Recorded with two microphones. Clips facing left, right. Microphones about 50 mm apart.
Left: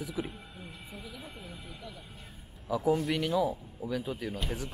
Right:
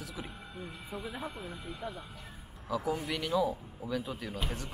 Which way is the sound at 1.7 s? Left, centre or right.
Right.